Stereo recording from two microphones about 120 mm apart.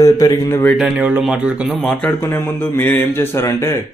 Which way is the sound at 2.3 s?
15° left (ahead or behind).